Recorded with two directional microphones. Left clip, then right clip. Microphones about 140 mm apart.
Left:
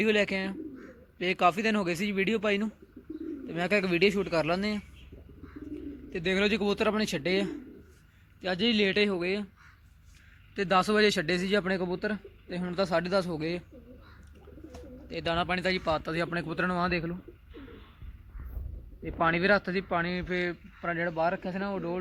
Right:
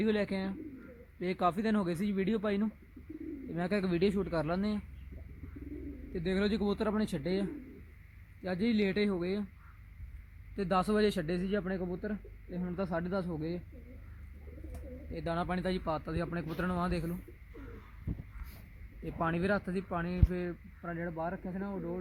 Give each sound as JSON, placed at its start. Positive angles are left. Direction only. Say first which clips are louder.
{"t": 0.0, "sound": "a man's voice", "louder": "left 7 dB", "side_deg": -10}
{"t": 6.1, "sound": "a man's voice", "louder": "left 6 dB", "side_deg": -10}
{"t": 8.8, "sound": "a man's voice", "louder": "left 6 dB", "side_deg": -15}
{"t": 10.5, "sound": "speech", "louder": "left 6 dB", "side_deg": -10}
{"t": 11.5, "sound": "speech", "louder": "left 7 dB", "side_deg": 20}
{"t": 12.5, "sound": "speech", "louder": "left 8 dB", "side_deg": 10}
{"t": 15.1, "sound": "a man's voice", "louder": "left 6 dB", "side_deg": -15}
{"t": 15.9, "sound": "speech", "louder": "left 7 dB", "side_deg": 0}
{"t": 19.2, "sound": "speech", "louder": "left 8 dB", "side_deg": 0}
{"t": 20.5, "sound": "speech", "louder": "left 9 dB", "side_deg": 20}